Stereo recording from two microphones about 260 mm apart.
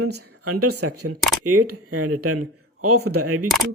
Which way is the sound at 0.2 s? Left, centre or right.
Right.